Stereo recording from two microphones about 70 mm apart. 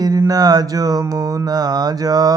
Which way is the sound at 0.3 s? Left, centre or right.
Right.